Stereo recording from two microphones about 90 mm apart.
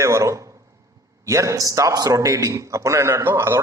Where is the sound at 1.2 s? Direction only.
35° right (ahead or behind).